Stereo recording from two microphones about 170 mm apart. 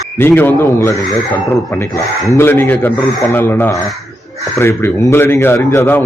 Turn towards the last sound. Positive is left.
turn(degrees=15)  # may be behind; listen again after turning